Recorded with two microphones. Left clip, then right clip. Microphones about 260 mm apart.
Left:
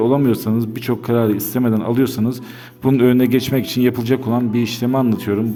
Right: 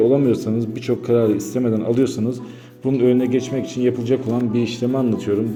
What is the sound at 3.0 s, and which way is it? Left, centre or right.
Speech, left.